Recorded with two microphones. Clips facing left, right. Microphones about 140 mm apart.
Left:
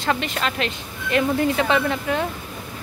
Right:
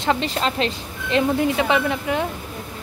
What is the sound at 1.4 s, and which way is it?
Speech, 15° right (ahead or behind).